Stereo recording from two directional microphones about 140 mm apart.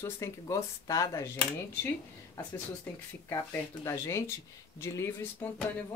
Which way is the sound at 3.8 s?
20° left (ahead or behind).